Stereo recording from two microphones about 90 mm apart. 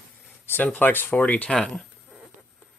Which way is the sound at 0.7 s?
25° left (ahead or behind).